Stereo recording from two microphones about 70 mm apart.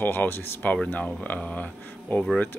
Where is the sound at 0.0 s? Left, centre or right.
Left.